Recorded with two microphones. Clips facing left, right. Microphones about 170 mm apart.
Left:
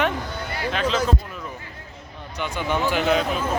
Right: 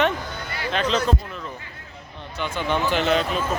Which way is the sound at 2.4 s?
10° left (ahead or behind).